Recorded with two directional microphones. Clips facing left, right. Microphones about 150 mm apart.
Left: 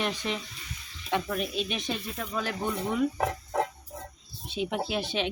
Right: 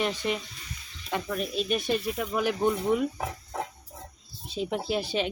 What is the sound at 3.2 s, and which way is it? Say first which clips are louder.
Music: left 5 dB; 70° left (ahead or behind).